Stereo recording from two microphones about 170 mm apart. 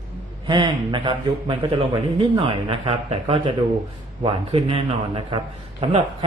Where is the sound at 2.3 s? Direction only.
30° right (ahead or behind).